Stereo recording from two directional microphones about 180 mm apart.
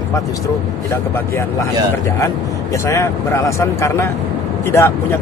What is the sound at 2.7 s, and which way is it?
Speech, 15° left (ahead or behind).